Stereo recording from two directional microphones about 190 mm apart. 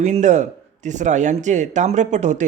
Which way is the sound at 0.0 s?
35° right (ahead or behind).